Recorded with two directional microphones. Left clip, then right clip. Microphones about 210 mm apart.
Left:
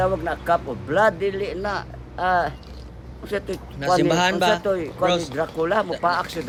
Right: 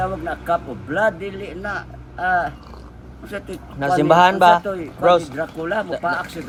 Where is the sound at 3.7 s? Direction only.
15° right (ahead or behind).